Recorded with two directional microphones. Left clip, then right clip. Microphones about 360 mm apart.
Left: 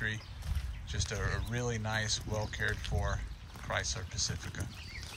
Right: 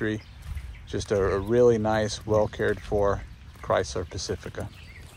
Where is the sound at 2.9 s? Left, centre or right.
Right.